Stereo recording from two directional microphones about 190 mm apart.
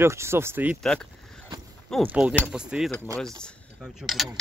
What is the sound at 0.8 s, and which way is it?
Speech, 5° left (ahead or behind).